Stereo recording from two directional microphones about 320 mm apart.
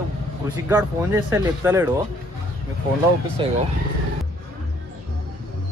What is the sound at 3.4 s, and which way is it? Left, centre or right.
Speech, centre.